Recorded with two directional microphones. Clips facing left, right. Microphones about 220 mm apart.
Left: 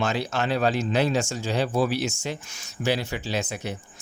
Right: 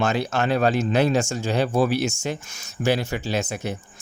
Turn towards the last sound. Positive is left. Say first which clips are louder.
# right 3 dB
turn(degrees=-45)  # may be behind; listen again after turning